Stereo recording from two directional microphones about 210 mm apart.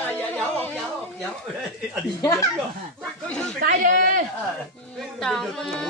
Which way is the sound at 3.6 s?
40° right (ahead or behind).